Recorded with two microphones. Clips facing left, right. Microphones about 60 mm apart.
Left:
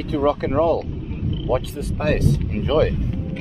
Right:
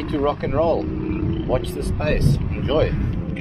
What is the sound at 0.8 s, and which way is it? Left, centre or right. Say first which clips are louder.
Speech: right 6 dB; right.